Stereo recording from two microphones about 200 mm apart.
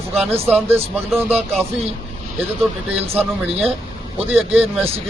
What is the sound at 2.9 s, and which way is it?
Speech, 30° right (ahead or behind).